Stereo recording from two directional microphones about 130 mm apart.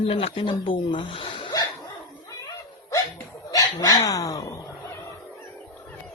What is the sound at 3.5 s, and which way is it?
Speech, 30° left (ahead or behind).